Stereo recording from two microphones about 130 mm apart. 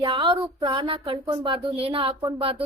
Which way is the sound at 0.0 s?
45° right (ahead or behind).